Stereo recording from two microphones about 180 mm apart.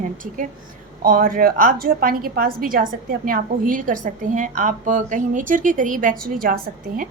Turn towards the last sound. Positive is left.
turn(degrees=-50)  # may be behind; listen again after turning